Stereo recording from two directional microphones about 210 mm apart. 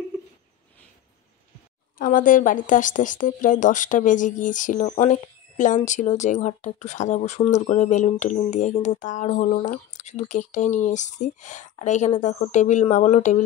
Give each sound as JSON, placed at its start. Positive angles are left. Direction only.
{"t": 2.0, "sound": "speech", "side_deg": 40}